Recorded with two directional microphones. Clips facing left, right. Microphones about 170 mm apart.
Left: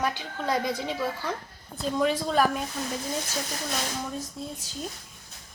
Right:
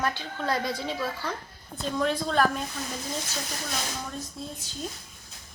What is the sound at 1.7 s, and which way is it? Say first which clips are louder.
Speech: left 2 dB; 5° left (ahead or behind).